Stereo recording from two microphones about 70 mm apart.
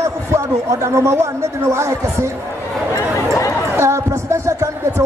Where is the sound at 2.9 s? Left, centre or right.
Left.